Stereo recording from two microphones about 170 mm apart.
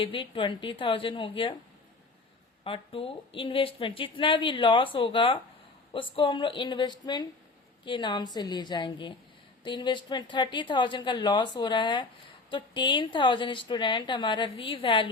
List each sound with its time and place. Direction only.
0.0 s a woman's voice: 30° left (ahead or behind)
2.6 s a woman's voice: 30° left (ahead or behind)